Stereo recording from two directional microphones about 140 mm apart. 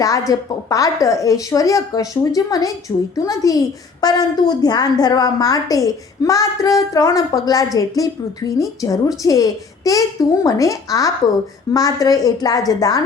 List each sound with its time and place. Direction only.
0.0 s a woman's voice: 25° left (ahead or behind)